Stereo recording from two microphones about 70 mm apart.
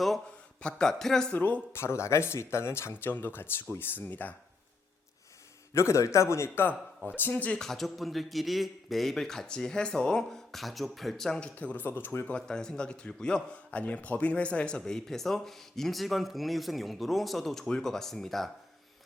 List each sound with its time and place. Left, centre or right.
0.6 s a man's voice: centre
1.3 s speech: left
1.7 s speech: left
5.7 s speech: left
7.1 s speech: left
7.6 s speech: centre
11.5 s speech: left
12.2 s a man's voice: centre